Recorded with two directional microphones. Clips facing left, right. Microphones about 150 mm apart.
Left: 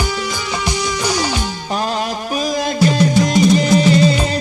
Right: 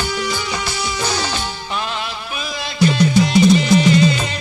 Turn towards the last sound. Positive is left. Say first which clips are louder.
# even
turn(degrees=40)  # may be behind; listen again after turning